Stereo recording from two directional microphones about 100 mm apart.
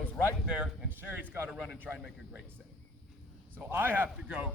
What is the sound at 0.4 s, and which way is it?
Speech, 10° right (ahead or behind).